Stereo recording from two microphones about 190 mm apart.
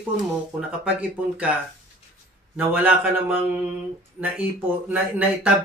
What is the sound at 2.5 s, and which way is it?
Speech, 10° right (ahead or behind).